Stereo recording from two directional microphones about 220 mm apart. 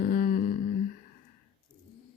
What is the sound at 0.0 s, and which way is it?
Humming, 40° left (ahead or behind).